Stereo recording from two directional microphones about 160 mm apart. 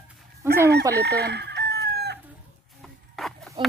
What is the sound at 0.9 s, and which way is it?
Chicken, 90° right.